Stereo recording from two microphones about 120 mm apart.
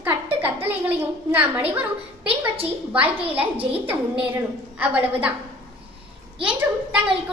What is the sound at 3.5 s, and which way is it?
Speech, 50° right (ahead or behind).